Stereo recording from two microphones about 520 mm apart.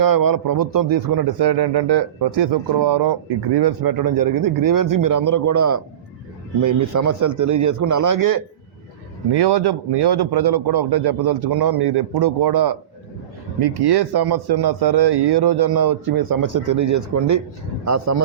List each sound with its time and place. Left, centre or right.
0.0 s a man's voice: right
9.3 s a man's voice: right